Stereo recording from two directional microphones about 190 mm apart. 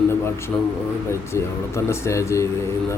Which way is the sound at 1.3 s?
15° left (ahead or behind).